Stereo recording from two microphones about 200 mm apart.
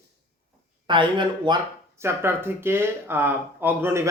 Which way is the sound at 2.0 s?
10° right (ahead or behind).